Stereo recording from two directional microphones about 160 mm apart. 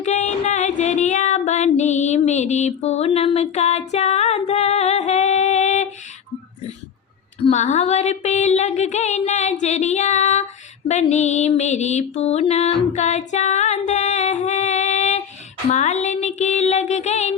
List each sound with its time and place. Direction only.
0.0 s music: 45° left (ahead or behind)
7.5 s music: 45° left (ahead or behind)